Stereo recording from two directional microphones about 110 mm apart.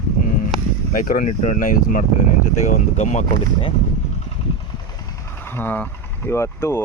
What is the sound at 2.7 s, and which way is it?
Speech, 90° left.